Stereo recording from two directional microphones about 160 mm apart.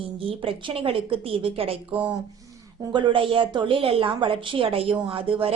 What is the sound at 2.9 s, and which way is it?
A woman's voice, 30° right (ahead or behind).